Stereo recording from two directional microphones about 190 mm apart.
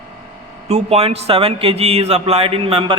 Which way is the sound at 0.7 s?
30° right (ahead or behind).